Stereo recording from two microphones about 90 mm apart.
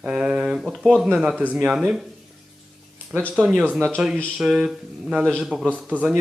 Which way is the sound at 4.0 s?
15° right (ahead or behind).